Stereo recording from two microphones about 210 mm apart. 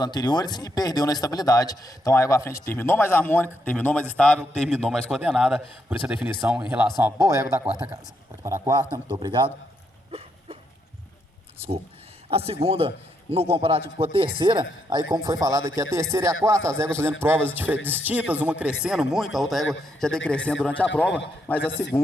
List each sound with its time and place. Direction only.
0.0 s a man's voice: 20° left (ahead or behind); by 9.5 s 20° right (ahead or behind)
10.1 s a sound: 30° right (ahead or behind)
12.3 s a man's voice: 30° right (ahead or behind); by 21.7 s 10° left (ahead or behind)